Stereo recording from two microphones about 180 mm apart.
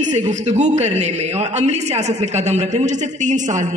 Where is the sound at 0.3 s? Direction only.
40° right (ahead or behind).